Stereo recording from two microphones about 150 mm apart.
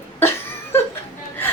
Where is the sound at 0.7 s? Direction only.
15° left (ahead or behind).